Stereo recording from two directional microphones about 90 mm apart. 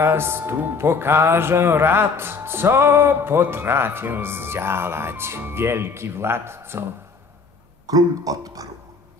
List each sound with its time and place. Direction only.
0.0 s speech: 25° right (ahead or behind)
7.8 s speech: 40° right (ahead or behind)